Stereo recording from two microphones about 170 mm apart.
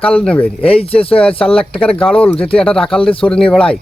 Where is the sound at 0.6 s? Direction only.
35° left (ahead or behind).